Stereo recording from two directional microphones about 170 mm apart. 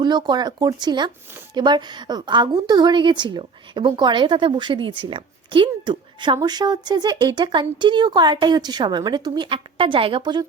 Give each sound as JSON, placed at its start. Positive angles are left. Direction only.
{"t": 0.0, "sound": "a woman's voice", "side_deg": -25}